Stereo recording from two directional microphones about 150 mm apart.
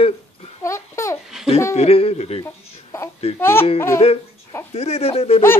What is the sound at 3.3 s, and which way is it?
Speech, 15° left (ahead or behind).